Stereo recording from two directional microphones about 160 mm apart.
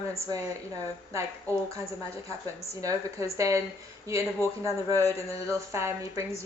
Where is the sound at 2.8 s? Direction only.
20° right (ahead or behind).